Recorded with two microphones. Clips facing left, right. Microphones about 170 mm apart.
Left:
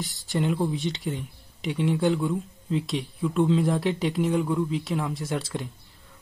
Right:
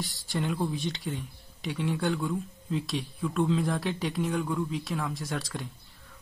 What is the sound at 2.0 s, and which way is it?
Speech, centre (ahead or behind).